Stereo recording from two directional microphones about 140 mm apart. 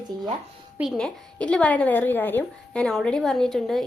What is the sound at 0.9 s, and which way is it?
A woman's voice, 5° left (ahead or behind).